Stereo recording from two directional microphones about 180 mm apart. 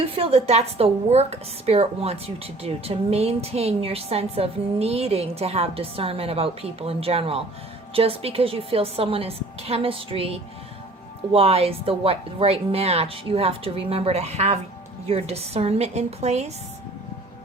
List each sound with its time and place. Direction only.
0.0 s speech: 30° right (ahead or behind)